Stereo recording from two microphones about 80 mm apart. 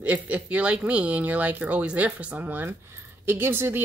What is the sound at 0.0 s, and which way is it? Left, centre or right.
Speech, centre.